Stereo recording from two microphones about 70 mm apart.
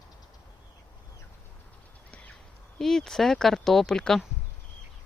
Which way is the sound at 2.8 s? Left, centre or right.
Centre.